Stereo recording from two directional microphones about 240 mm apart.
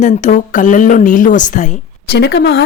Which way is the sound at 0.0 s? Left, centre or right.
Left.